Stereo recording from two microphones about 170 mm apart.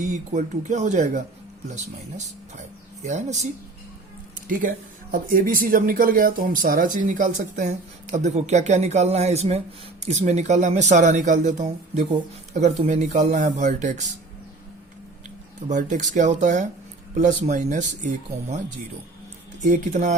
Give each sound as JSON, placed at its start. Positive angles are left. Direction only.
{"t": 0.0, "sound": "speech", "side_deg": -45}
{"t": 15.7, "sound": "speech", "side_deg": -45}
{"t": 19.6, "sound": "speech", "side_deg": -45}